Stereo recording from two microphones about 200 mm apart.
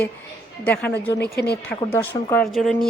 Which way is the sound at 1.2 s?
55° left (ahead or behind).